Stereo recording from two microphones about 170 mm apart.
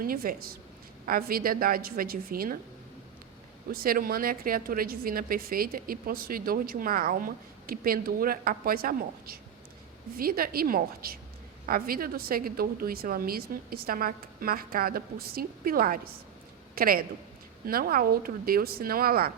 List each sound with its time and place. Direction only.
0.0 s a woman's voice: 60° right (ahead or behind)
3.7 s a woman's voice: 60° right (ahead or behind)